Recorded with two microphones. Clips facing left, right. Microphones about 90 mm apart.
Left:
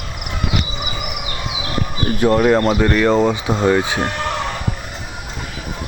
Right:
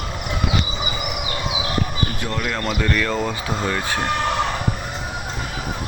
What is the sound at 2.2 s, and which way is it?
Speech, 40° left (ahead or behind).